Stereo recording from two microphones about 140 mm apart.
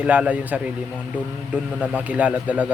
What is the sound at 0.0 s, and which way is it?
Speech, 10° right (ahead or behind).